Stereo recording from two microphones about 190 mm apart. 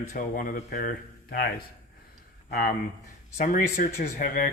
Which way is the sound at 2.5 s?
50° left (ahead or behind).